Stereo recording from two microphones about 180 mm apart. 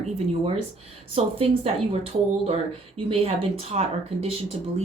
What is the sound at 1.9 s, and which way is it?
Speech, 35° right (ahead or behind).